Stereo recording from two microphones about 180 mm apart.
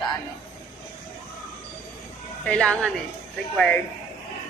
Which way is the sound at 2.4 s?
5° left (ahead or behind).